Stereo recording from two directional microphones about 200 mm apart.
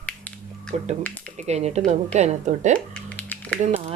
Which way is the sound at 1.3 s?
35° right (ahead or behind).